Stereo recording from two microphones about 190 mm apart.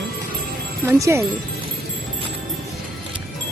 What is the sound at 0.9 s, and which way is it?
Speech, 15° right (ahead or behind).